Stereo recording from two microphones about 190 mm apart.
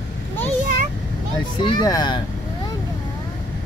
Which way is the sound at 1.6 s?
25° left (ahead or behind).